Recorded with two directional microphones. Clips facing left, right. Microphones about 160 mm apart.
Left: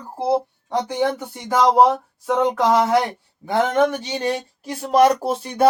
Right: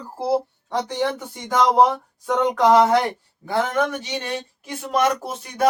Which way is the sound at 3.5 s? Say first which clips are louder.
Left 4 dB; 25° left (ahead or behind).